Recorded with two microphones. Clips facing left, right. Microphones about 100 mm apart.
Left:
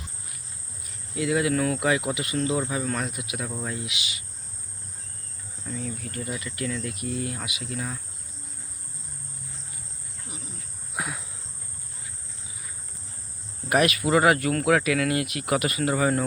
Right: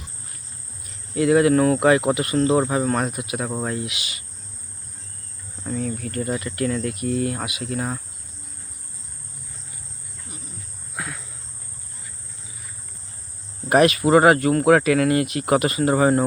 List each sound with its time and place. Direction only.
1.1 s speech: 50° right (ahead or behind)
5.6 s speech: 50° right (ahead or behind)
10.9 s cricket: 15° left (ahead or behind)
13.7 s speech: 35° right (ahead or behind)